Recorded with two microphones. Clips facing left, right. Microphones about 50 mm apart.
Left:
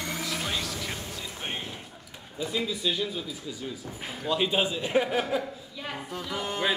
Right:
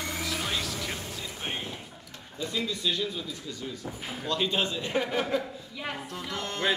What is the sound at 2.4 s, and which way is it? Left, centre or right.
Speech, centre.